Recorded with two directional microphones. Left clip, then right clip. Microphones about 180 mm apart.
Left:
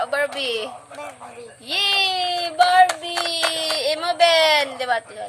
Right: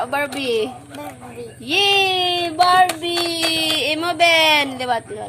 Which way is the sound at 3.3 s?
15° left (ahead or behind).